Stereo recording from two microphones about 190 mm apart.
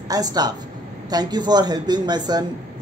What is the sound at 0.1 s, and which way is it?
A man's voice, 20° right (ahead or behind).